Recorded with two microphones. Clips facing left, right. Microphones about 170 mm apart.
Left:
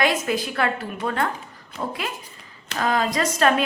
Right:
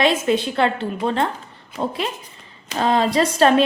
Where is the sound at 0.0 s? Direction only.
25° right (ahead or behind).